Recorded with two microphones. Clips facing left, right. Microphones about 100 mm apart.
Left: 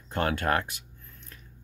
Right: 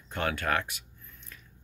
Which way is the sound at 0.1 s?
40° left (ahead or behind).